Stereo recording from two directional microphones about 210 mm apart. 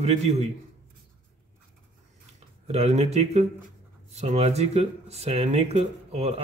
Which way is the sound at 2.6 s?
30° right (ahead or behind).